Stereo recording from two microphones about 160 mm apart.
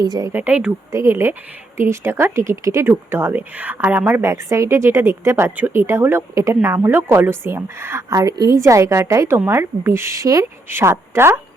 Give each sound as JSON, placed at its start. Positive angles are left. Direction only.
{"t": 0.0, "sound": "speech", "side_deg": -25}
{"t": 0.3, "sound": "speech", "side_deg": -10}